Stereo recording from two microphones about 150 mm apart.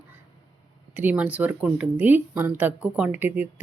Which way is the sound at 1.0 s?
10° right (ahead or behind).